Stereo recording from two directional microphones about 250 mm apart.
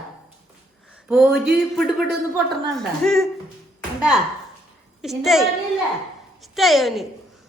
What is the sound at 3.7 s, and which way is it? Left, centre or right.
Music, centre.